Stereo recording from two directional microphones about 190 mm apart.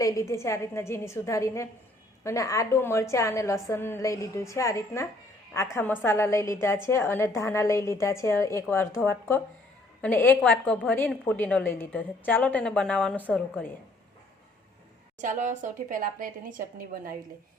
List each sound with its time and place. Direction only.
0.0 s a woman's voice: 15° left (ahead or behind)
15.2 s a woman's voice: 40° right (ahead or behind)